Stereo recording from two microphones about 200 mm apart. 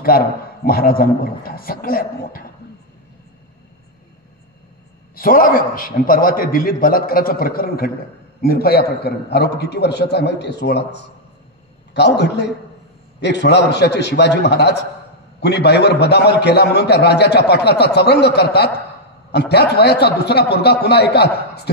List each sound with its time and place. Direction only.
0.7 s a man's voice: 45° left (ahead or behind)
5.1 s a man's voice: 45° left (ahead or behind)